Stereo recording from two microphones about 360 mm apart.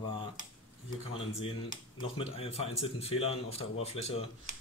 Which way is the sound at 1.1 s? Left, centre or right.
Centre.